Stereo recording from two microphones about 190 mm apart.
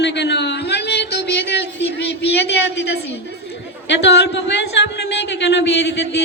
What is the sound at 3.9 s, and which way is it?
A woman's voice, 65° left (ahead or behind).